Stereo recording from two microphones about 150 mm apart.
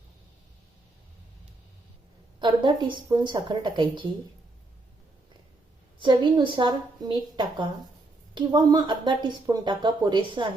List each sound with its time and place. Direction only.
2.4 s speech: 30° right (ahead or behind)
6.0 s a woman's voice: 30° right (ahead or behind)